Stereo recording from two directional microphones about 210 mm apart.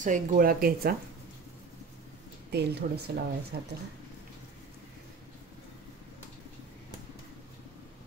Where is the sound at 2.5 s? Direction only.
50° right (ahead or behind).